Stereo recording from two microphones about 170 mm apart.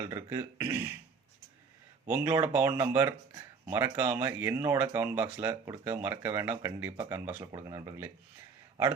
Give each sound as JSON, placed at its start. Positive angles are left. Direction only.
{"t": 0.0, "sound": "speech", "side_deg": -15}
{"t": 2.0, "sound": "speech", "side_deg": -15}